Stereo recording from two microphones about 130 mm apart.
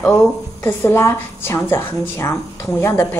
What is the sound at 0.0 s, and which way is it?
Speech, 10° left (ahead or behind).